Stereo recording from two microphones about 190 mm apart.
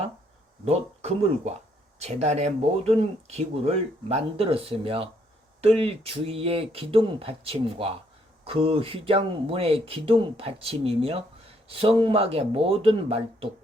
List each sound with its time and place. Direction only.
0.6 s speech: 35° right (ahead or behind)